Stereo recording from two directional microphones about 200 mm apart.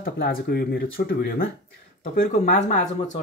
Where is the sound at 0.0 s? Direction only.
50° left (ahead or behind).